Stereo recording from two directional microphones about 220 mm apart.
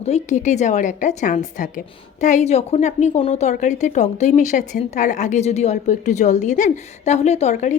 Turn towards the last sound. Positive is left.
turn(degrees=35)  # may be behind; listen again after turning